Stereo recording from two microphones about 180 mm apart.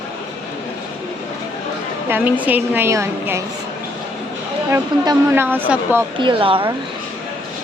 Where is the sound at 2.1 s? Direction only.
10° right (ahead or behind).